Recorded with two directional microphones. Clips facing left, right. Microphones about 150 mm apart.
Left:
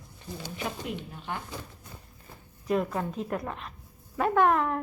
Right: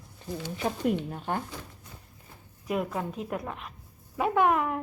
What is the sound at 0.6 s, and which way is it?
Speech, 45° right (ahead or behind).